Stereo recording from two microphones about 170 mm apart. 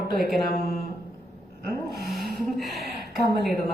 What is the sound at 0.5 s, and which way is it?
Speech, 65° left (ahead or behind).